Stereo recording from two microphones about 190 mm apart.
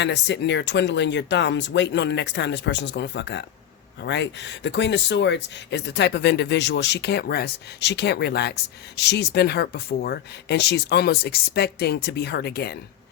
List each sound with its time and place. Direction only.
0.0 s speech: 65° left (ahead or behind)